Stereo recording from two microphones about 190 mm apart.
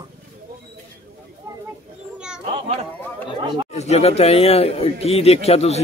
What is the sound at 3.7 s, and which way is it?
Speech, 35° left (ahead or behind).